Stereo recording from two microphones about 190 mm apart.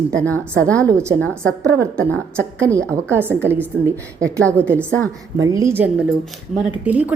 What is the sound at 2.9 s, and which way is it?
A woman's voice, 10° right (ahead or behind).